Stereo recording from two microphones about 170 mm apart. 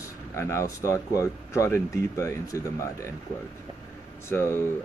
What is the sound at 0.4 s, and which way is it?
Speech, 15° left (ahead or behind).